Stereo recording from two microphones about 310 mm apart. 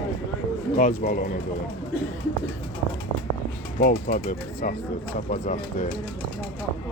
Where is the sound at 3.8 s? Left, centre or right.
Left.